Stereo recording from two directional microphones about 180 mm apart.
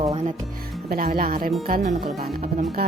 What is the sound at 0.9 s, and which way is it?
Speech, 55° right (ahead or behind).